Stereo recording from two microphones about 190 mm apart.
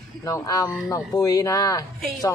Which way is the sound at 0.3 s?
20° left (ahead or behind).